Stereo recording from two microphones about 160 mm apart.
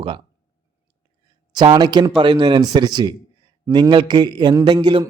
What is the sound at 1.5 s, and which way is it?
A man's voice, 25° right (ahead or behind).